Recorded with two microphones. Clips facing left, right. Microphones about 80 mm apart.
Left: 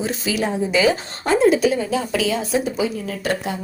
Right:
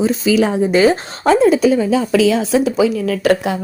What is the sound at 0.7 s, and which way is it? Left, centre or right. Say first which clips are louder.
Speech: right 5 dB; right.